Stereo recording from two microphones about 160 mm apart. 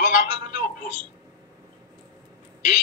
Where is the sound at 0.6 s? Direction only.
55° left (ahead or behind).